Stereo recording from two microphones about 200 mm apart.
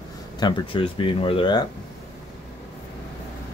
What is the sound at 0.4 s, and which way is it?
Speech, 25° left (ahead or behind).